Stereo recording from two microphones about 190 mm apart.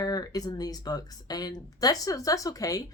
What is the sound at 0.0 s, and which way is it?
A woman's voice, 20° left (ahead or behind).